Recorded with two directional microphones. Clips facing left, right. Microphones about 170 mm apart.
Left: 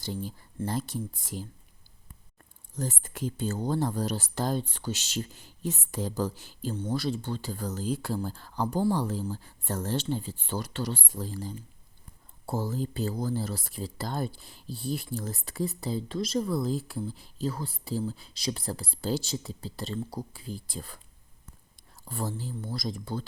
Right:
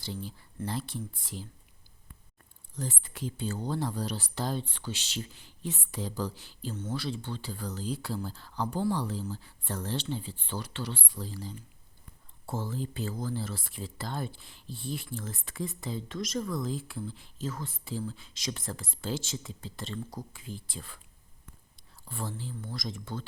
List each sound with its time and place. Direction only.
0.0 s speech: 45° left (ahead or behind)
2.7 s speech: 45° left (ahead or behind)
8.6 s speech: 30° left (ahead or behind)
8.9 s speech: 45° left (ahead or behind)